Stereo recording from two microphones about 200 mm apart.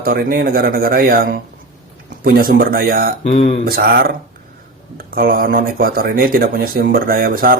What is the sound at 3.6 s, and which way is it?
Speech, 50° right (ahead or behind).